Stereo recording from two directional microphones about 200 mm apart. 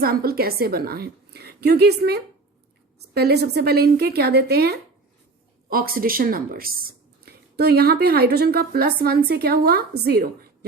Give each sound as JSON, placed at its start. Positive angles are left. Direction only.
{"t": 0.0, "sound": "a woman's voice", "side_deg": -50}